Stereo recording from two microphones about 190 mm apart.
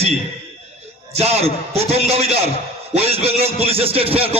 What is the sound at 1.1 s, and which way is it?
A man's voice, 35° right (ahead or behind).